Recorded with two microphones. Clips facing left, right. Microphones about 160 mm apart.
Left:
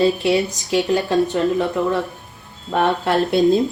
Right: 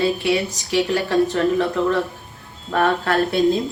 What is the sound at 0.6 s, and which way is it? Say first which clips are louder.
Speech: left 2 dB; 15° left (ahead or behind).